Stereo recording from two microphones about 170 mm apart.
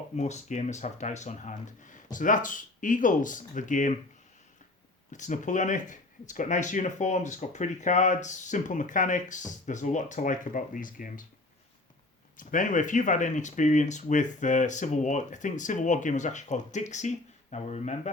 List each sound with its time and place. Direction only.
0.2 s speech: 45° left (ahead or behind)
5.1 s speech: 45° left (ahead or behind)
12.4 s speech: 50° left (ahead or behind)